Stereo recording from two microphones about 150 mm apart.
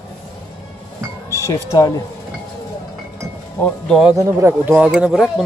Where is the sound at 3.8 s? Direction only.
Centre (ahead or behind).